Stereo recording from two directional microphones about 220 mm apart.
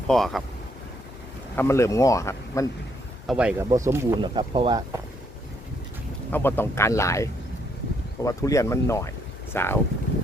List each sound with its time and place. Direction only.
0.1 s speech: centre (ahead or behind)
1.5 s speech: 10° left (ahead or behind)
3.2 s speech: 5° right (ahead or behind)
6.3 s speech: 10° left (ahead or behind)